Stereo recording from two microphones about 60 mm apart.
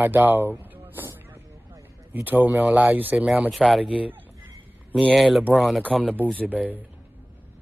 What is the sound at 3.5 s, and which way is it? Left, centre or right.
Speech, centre.